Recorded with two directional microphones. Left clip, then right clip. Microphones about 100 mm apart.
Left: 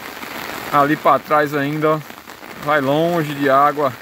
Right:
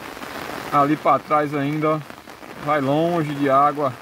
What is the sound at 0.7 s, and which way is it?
Speech, 5° left (ahead or behind).